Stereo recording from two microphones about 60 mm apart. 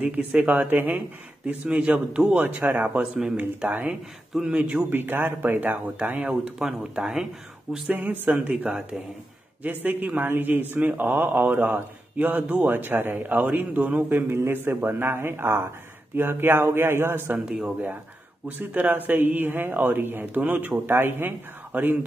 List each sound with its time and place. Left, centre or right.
0.0 s a man's voice: right
2.4 s a man's voice: right
3.9 s speech: centre
4.5 s a man's voice: right
4.7 s a man's voice: right
6.2 s speech: centre
7.9 s a man's voice: right
8.3 s a man's voice: centre
9.6 s a man's voice: right
12.7 s a man's voice: right
18.6 s a man's voice: right